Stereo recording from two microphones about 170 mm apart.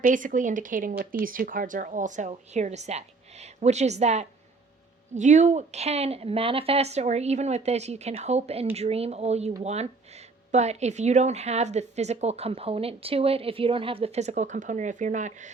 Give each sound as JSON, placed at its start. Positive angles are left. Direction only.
{"t": 0.0, "sound": "speech", "side_deg": -50}